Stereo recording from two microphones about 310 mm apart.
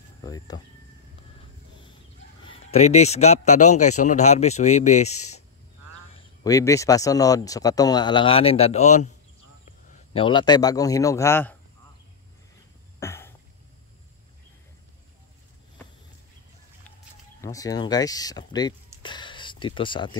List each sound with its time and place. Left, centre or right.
0.2 s speech: centre
2.7 s speech: left
6.4 s speech: centre
13.0 s cough: centre
17.4 s speech: centre